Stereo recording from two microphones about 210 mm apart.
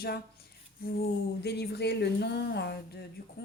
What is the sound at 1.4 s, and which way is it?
Speech, 50° left (ahead or behind).